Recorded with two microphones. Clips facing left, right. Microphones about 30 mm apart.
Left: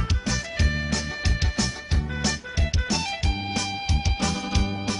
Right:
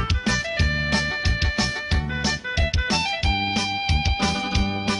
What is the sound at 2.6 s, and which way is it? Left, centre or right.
Music, right.